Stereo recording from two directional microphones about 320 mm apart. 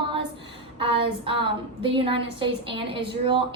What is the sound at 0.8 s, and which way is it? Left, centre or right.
A woman's voice, centre.